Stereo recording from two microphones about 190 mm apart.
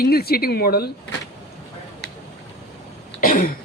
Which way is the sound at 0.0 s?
55° left (ahead or behind).